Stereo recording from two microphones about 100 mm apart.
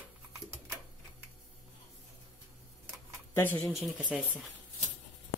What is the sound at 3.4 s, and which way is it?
Speech, 20° left (ahead or behind).